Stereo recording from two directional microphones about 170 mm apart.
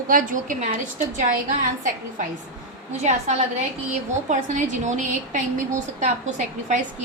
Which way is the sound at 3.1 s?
40° right (ahead or behind).